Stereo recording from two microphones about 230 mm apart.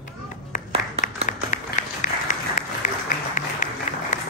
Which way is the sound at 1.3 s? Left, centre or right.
Left.